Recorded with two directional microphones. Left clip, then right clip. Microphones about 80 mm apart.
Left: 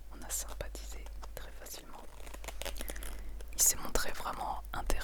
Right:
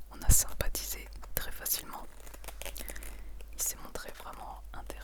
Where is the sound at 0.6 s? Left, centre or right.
Right.